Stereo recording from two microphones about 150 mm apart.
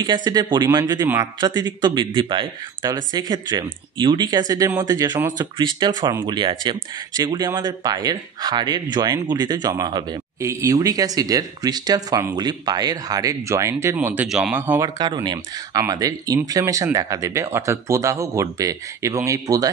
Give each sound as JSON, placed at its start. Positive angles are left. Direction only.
{"t": 0.0, "sound": "speech", "side_deg": -30}
{"t": 15.0, "sound": "speech", "side_deg": -30}